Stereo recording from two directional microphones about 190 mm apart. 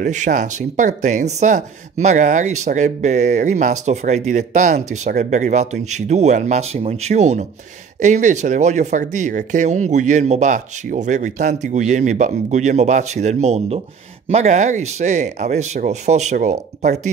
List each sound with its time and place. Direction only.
0.0 s speech: 40° right (ahead or behind)